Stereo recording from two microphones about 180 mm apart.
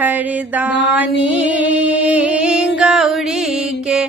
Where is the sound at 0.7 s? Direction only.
75° left (ahead or behind).